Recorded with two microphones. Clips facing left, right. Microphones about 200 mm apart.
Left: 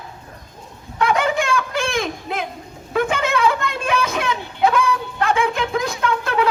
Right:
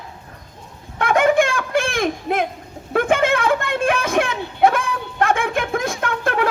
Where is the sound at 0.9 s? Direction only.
50° right (ahead or behind).